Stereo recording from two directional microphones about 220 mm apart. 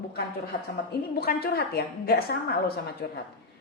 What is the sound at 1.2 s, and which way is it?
A woman's voice, 45° left (ahead or behind).